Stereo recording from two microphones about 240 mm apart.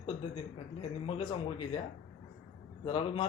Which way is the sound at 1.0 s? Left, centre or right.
Left.